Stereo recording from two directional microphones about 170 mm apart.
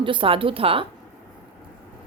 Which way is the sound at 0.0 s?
30° right (ahead or behind).